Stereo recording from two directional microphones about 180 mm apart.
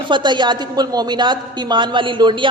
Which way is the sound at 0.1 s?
25° right (ahead or behind).